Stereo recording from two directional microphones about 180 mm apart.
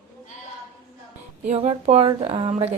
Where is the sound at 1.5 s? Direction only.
35° right (ahead or behind).